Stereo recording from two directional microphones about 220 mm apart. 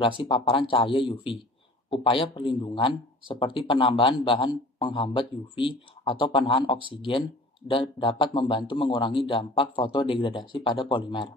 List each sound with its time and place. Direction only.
0.0 s speech: 25° left (ahead or behind)